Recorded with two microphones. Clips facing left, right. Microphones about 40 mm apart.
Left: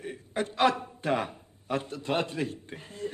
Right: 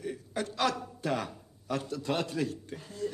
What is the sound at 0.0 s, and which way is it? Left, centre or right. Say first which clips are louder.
A man's voice: left 2 dB; left.